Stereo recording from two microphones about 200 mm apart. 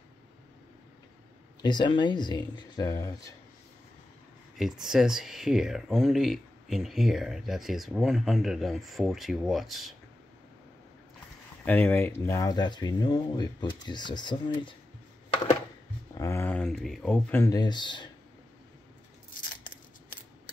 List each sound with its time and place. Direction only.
1.6 s speech: 20° left (ahead or behind)
4.6 s speech: centre (ahead or behind)
11.6 s speech: 10° left (ahead or behind)
16.2 s speech: 15° left (ahead or behind)
17.4 s speech: 20° left (ahead or behind)
19.5 s scissors: 40° left (ahead or behind)